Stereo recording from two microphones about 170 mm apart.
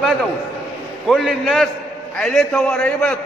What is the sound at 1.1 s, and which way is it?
A man's voice, centre (ahead or behind).